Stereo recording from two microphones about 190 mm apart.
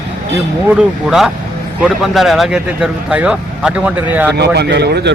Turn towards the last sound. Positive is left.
turn(degrees=-60)  # may be behind; listen again after turning